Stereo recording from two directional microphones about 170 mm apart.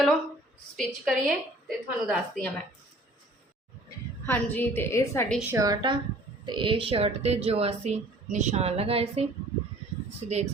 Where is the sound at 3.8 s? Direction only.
10° left (ahead or behind).